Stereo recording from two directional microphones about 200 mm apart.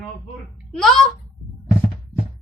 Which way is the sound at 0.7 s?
Centre (ahead or behind).